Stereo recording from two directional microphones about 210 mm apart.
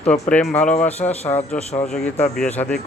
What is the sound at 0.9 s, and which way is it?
Speech, 30° left (ahead or behind).